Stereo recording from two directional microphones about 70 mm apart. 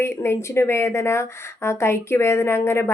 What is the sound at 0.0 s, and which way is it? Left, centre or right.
Speech, left.